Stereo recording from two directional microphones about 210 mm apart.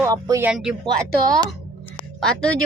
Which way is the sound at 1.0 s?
45° right (ahead or behind).